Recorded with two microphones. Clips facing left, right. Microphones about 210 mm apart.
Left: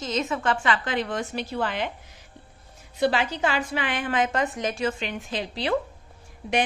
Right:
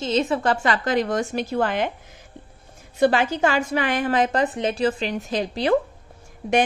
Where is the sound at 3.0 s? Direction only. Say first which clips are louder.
Right 5 dB; 50° right (ahead or behind).